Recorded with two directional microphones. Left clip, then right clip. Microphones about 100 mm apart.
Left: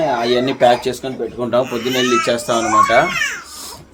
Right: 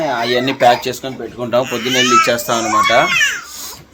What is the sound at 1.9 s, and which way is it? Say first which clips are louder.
Speech: right 5 dB; 15° right (ahead or behind).